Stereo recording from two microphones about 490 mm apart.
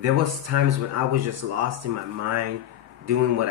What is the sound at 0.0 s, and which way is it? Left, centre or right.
Speech, right.